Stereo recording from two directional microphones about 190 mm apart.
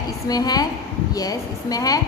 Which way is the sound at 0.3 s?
20° left (ahead or behind).